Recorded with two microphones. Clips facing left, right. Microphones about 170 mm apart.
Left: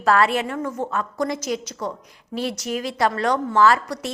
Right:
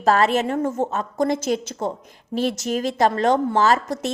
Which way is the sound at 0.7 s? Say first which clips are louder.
Right 2 dB; 25° right (ahead or behind).